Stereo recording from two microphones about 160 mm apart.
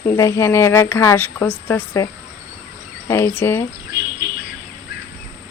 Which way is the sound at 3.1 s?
15° left (ahead or behind).